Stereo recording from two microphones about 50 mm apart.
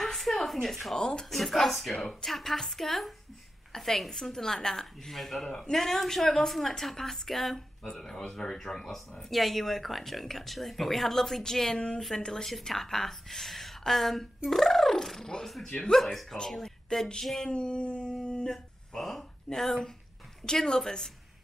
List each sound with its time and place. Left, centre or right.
0.0 s a sound: centre
0.9 s a woman's voice: centre
1.3 s a woman's voice: centre
17.5 s dog: left
18.2 s a sound: centre
20.4 s a woman's voice: centre